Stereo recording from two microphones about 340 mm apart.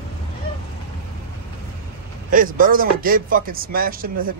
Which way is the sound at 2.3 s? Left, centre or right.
Right.